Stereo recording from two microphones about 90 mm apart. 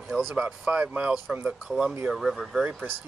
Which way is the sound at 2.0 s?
Centre (ahead or behind).